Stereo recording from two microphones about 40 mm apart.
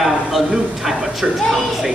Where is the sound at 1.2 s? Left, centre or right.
Centre.